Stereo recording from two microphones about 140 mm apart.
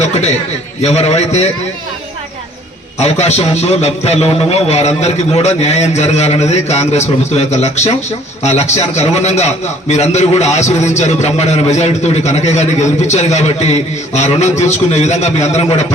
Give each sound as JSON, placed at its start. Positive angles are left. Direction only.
{"t": 0.0, "sound": "a sound", "side_deg": 50}
{"t": 0.8, "sound": "a man's voice", "side_deg": 50}
{"t": 3.0, "sound": "a man's voice", "side_deg": 50}